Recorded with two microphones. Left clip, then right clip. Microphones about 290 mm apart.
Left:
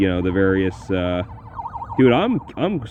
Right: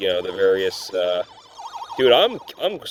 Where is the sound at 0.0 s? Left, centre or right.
Right.